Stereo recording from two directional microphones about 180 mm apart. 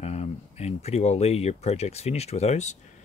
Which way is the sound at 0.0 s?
35° left (ahead or behind).